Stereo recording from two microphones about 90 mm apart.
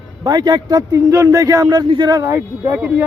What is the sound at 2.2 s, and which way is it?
Speech, 30° right (ahead or behind).